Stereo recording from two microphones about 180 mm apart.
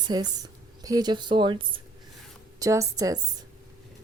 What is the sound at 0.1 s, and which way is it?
A woman's voice, 20° right (ahead or behind).